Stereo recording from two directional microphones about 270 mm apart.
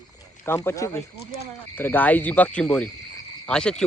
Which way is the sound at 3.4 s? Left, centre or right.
Centre.